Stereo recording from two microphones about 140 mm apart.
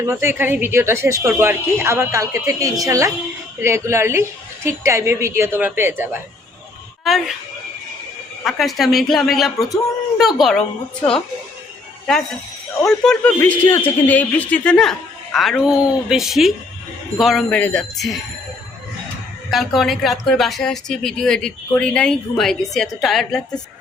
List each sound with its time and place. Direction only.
0.0 s a woman's voice: 20° right (ahead or behind)
7.0 s speech: centre (ahead or behind)
8.4 s speech: centre (ahead or behind)
12.8 s speech: 5° left (ahead or behind)
13.4 s speech: 15° left (ahead or behind)
19.5 s speech: centre (ahead or behind)